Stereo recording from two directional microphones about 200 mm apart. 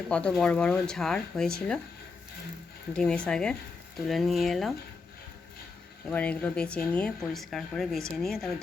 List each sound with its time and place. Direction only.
0.1 s speech: 5° left (ahead or behind)
2.9 s speech: 5° left (ahead or behind)
6.1 s speech: 5° left (ahead or behind)